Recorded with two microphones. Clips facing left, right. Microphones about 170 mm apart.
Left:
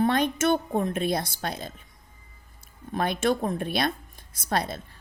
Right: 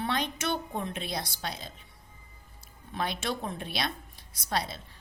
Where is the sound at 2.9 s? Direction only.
50° left (ahead or behind).